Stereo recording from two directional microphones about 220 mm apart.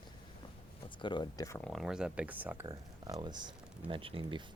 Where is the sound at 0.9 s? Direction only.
20° left (ahead or behind).